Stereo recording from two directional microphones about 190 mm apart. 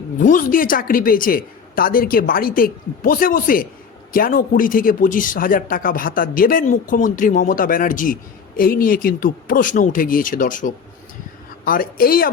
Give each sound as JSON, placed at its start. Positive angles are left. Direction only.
{"t": 0.2, "sound": "speech", "side_deg": 45}